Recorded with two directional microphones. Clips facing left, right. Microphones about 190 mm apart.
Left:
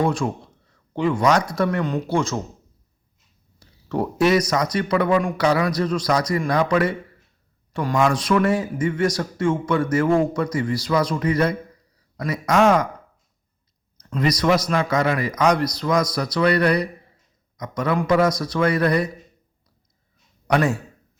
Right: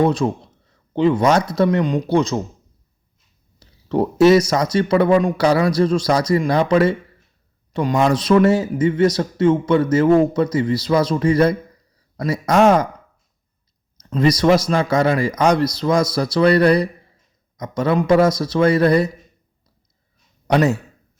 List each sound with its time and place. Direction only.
0.0 s a man's voice: 20° right (ahead or behind)
3.6 s speech: 20° right (ahead or behind)
14.0 s speech: 30° right (ahead or behind)
20.5 s speech: 20° right (ahead or behind)